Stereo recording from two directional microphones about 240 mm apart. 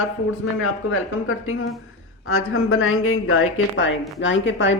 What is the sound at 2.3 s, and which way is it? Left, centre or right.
A woman's voice, left.